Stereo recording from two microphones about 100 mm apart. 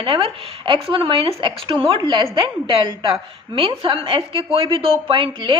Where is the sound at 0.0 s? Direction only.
60° right (ahead or behind).